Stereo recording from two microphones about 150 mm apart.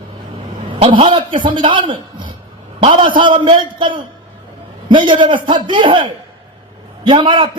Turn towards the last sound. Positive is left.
turn(degrees=-35)  # may be behind; listen again after turning